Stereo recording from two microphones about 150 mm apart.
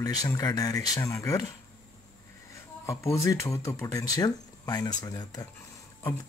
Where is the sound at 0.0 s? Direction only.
25° left (ahead or behind).